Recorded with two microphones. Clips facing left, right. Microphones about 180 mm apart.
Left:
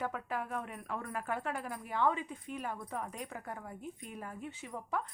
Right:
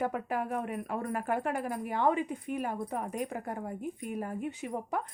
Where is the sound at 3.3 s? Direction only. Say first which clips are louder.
Right 7 dB; 45° right (ahead or behind).